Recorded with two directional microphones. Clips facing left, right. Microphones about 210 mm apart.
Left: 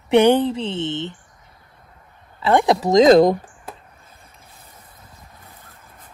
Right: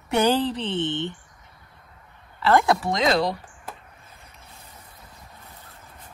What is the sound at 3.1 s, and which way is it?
Speech, 50° left (ahead or behind).